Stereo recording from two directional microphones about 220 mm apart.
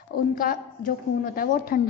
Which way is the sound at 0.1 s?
40° left (ahead or behind).